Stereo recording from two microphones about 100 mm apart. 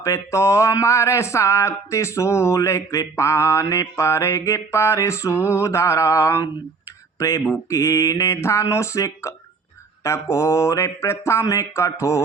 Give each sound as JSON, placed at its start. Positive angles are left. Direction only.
{"t": 0.0, "sound": "speech", "side_deg": 30}